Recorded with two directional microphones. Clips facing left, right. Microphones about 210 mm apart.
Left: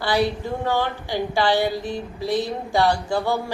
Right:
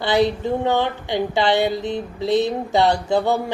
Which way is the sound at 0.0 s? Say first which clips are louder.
Right 3 dB; 20° right (ahead or behind).